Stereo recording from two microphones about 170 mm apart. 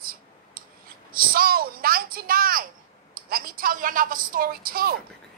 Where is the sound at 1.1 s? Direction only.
60° right (ahead or behind).